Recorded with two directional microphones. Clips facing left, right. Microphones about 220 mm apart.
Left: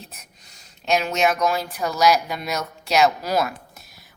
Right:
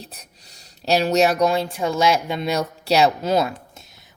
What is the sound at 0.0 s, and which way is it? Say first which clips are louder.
A woman's voice: right 3 dB; 35° right (ahead or behind).